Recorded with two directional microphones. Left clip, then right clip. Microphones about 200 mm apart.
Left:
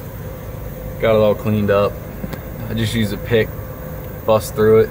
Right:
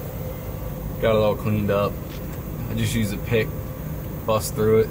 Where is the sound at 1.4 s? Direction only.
30° left (ahead or behind).